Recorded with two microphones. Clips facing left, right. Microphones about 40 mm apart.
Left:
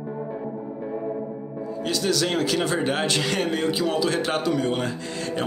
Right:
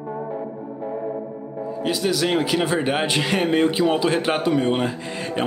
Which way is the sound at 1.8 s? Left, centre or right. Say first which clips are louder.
Right 2 dB; centre.